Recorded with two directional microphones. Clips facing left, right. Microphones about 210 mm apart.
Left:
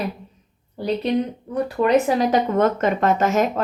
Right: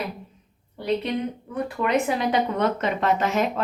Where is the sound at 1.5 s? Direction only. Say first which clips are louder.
Left 6 dB; 35° left (ahead or behind).